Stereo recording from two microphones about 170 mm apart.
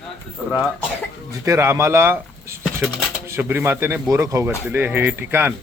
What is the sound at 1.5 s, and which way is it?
Speech, 15° right (ahead or behind).